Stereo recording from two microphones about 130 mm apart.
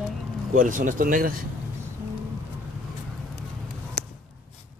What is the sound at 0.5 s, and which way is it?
Speech, 90° right.